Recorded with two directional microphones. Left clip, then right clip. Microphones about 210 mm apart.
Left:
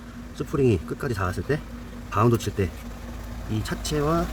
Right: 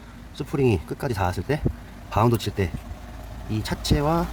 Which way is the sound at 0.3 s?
25° right (ahead or behind).